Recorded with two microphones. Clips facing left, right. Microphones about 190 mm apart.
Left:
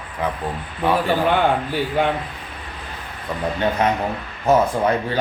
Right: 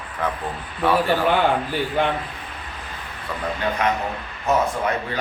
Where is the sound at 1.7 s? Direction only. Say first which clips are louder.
Left 2 dB; centre (ahead or behind).